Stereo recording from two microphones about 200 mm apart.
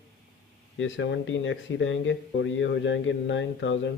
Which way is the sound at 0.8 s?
70° left (ahead or behind).